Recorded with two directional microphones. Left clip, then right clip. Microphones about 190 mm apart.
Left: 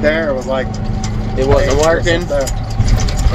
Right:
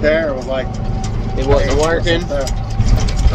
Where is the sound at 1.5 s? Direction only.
45° left (ahead or behind).